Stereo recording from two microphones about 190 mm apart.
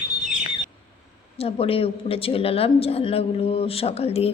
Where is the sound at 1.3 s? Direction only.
30° left (ahead or behind).